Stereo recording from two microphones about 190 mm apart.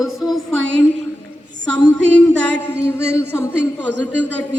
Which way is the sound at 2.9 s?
10° left (ahead or behind).